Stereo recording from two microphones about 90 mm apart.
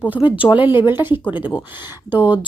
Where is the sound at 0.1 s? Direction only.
15° right (ahead or behind).